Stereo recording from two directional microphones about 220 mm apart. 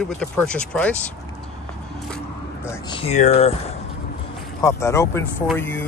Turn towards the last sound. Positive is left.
turn(degrees=10)  # may be behind; listen again after turning